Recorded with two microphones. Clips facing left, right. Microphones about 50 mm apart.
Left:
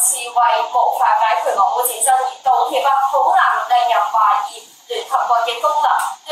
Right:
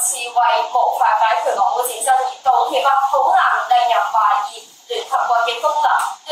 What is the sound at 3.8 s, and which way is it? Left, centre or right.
Speech, left.